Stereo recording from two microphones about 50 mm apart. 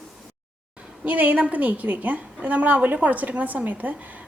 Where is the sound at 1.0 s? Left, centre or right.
Right.